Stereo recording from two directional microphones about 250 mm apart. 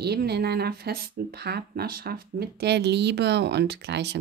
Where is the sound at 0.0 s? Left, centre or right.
Right.